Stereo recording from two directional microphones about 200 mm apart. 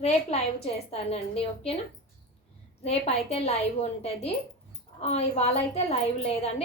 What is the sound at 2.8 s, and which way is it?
Speech, 30° left (ahead or behind).